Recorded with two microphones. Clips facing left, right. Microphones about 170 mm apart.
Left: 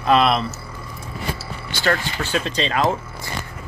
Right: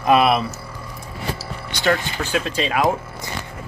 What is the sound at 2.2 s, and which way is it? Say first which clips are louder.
Speech: right 1 dB; 10° right (ahead or behind).